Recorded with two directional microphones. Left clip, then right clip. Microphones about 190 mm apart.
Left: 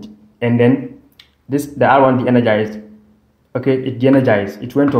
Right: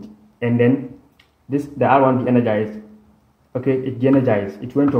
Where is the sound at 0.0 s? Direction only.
10° left (ahead or behind).